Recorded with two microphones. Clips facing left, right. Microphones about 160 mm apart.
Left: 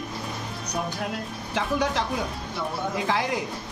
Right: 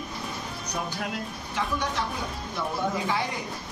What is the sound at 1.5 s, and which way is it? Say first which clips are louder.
Speech: left 4 dB; 90° left.